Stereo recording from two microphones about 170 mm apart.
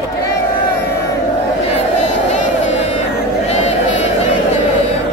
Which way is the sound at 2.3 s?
40° left (ahead or behind).